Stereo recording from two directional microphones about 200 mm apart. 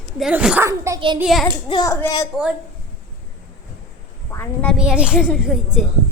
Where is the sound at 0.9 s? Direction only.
25° right (ahead or behind).